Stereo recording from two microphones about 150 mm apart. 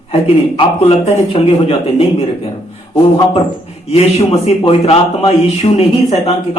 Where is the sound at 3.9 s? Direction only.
45° left (ahead or behind).